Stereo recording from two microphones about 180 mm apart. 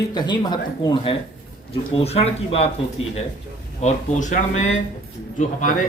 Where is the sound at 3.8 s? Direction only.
40° left (ahead or behind).